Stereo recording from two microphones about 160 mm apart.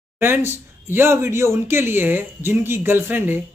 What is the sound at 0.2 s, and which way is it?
Speech, 15° right (ahead or behind).